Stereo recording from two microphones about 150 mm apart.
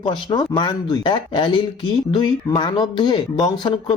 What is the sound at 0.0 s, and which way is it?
Speech, 30° left (ahead or behind).